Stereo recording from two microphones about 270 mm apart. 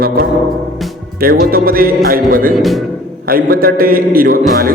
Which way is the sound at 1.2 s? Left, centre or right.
Right.